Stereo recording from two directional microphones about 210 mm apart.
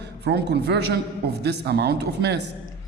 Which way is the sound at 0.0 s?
55° right (ahead or behind).